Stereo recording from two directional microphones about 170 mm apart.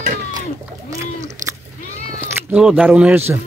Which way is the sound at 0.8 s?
20° right (ahead or behind).